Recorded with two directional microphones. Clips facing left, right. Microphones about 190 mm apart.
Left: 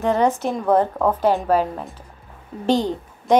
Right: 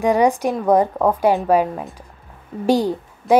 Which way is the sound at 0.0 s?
15° right (ahead or behind).